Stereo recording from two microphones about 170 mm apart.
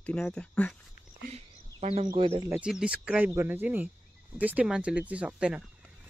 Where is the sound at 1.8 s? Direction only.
40° right (ahead or behind).